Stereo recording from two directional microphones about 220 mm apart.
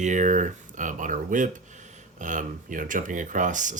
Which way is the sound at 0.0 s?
35° right (ahead or behind).